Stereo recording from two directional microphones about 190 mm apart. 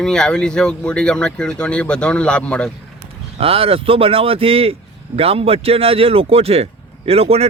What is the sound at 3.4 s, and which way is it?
Speech, 30° right (ahead or behind).